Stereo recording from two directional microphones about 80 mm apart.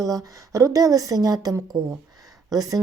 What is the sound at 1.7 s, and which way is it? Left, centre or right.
Speech, right.